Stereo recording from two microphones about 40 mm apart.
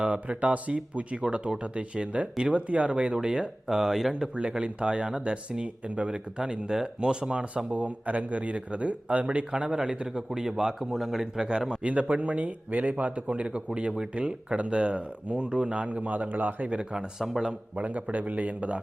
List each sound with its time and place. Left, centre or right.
0.0 s speech: right
3.7 s a man's voice: centre
4.4 s speech: right
9.5 s a man's voice: right
11.8 s speech: right
16.6 s speech: right
17.2 s a man's voice: centre
17.8 s speech: right